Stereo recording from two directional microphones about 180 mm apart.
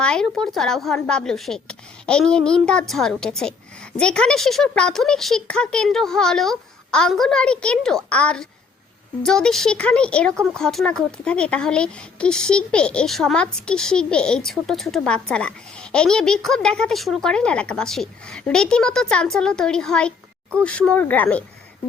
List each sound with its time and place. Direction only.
0.0 s speech: 5° left (ahead or behind)